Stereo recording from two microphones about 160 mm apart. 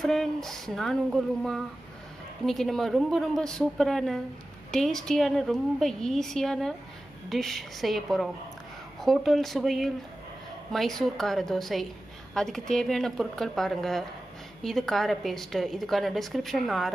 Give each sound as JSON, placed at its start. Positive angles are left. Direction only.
{"t": 0.0, "sound": "a woman's voice", "side_deg": 0}